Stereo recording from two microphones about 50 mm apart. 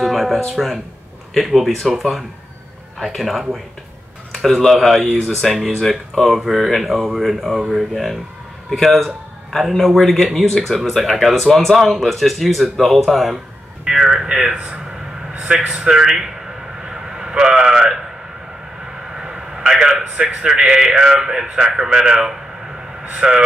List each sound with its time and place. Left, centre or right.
0.0 s music: centre
0.6 s a man's voice: centre
13.8 s a sound: centre
14.2 s a man's voice: centre
16.8 s a sound: centre
20.2 s a man's voice: right